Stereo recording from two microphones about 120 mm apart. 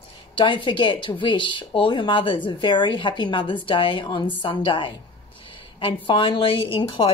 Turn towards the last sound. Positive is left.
turn(degrees=45)  # may be behind; listen again after turning